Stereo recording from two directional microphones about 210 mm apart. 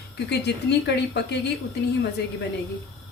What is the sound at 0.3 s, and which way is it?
Speech, 55° left (ahead or behind).